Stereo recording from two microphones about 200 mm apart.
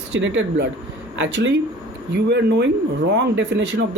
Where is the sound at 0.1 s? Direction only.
65° right (ahead or behind).